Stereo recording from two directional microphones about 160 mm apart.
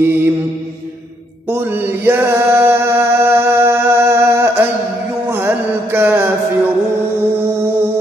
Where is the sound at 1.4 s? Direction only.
15° right (ahead or behind).